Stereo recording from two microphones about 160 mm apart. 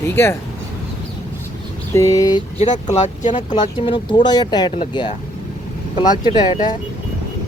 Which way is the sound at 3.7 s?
30° left (ahead or behind).